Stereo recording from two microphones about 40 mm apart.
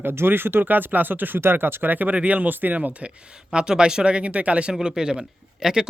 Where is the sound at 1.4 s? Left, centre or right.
Right.